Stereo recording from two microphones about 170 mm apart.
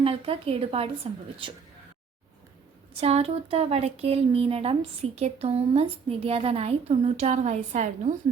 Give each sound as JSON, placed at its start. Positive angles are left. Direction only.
{"t": 0.0, "sound": "speech", "side_deg": -35}
{"t": 2.9, "sound": "speech", "side_deg": -35}